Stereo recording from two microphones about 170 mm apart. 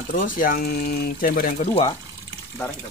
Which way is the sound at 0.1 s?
55° left (ahead or behind).